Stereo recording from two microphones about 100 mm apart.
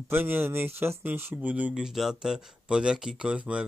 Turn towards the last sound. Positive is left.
turn(degrees=-10)  # may be behind; listen again after turning